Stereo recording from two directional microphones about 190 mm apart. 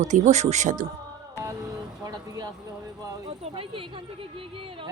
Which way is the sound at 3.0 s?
30° right (ahead or behind).